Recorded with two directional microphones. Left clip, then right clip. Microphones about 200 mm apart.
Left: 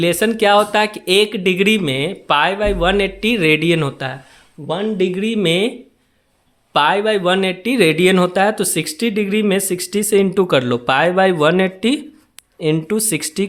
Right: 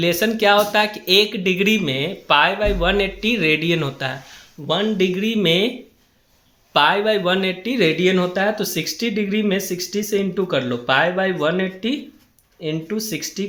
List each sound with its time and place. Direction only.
0.0 s speech: 30° left (ahead or behind)
4.6 s speech: 20° left (ahead or behind)
6.7 s speech: 30° left (ahead or behind)